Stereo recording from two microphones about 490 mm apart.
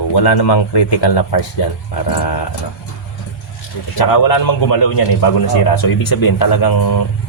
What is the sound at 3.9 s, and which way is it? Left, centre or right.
A man's voice, left.